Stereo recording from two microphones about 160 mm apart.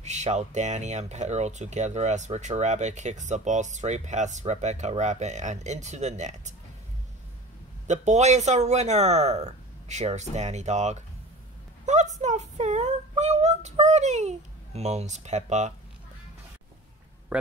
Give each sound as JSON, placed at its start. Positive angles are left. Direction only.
{"t": 0.0, "sound": "speech", "side_deg": -45}
{"t": 7.8, "sound": "speech", "side_deg": -45}
{"t": 17.3, "sound": "speech", "side_deg": -5}